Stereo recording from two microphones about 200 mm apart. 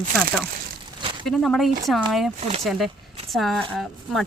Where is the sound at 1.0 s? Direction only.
25° right (ahead or behind).